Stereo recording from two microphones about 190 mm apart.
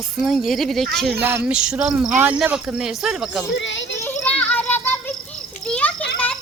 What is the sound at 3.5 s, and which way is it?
Speech, 75° left (ahead or behind).